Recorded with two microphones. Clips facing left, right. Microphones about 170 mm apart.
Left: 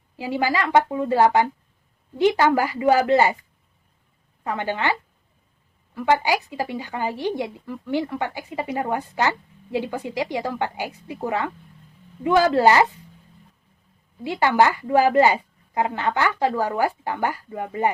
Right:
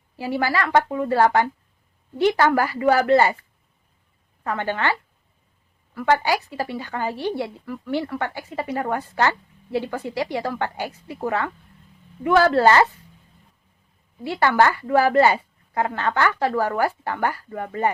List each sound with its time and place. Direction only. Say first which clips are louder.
0.2 s speech: even; 15° left (ahead or behind)
4.4 s speech: even; 15° left (ahead or behind)
14.3 s speech: even; 15° left (ahead or behind)